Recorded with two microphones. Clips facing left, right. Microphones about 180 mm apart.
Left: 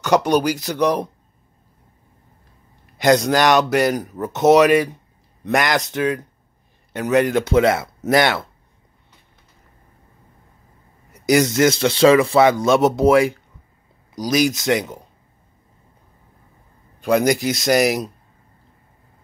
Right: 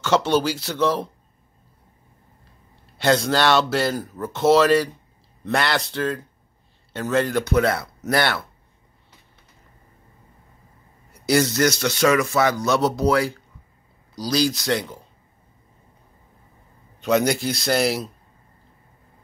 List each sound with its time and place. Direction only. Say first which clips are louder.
0.0 s speech: left 3 dB; 15° left (ahead or behind)
3.0 s speech: left 4 dB; 15° left (ahead or behind)
11.2 s speech: left 4 dB; 20° left (ahead or behind)
17.0 s speech: left 3 dB; 10° left (ahead or behind)